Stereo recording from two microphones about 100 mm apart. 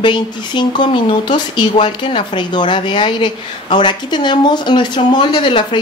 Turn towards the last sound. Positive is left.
turn(degrees=55)  # may be behind; listen again after turning